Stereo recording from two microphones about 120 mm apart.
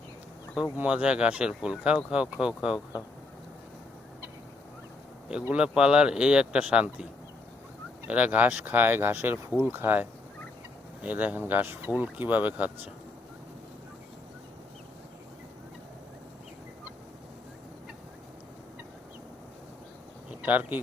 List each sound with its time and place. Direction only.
0.8 s speech: 10° right (ahead or behind)
5.3 s speech: 10° right (ahead or behind)
20.4 s speech: 15° right (ahead or behind)